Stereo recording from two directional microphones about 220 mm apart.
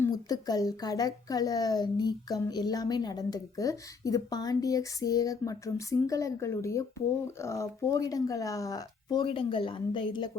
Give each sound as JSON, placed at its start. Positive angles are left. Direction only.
{"t": 0.0, "sound": "speech", "side_deg": 15}